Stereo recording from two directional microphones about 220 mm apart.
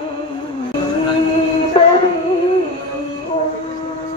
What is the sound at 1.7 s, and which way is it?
Music, 25° left (ahead or behind).